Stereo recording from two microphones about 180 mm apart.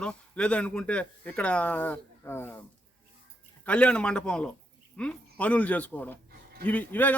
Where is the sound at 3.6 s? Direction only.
5° left (ahead or behind).